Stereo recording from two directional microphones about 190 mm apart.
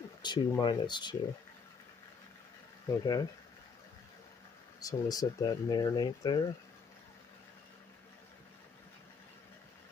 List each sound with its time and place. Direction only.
0.2 s speech: 25° left (ahead or behind)
3.0 s speech: 20° left (ahead or behind)
4.7 s speech: 20° left (ahead or behind)